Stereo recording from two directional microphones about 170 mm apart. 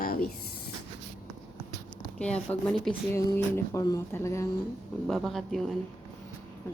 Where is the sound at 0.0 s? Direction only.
60° left (ahead or behind).